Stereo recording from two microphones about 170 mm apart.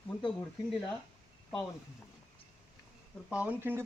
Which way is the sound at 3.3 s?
10° right (ahead or behind).